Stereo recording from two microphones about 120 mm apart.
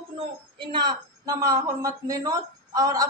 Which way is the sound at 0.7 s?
40° right (ahead or behind).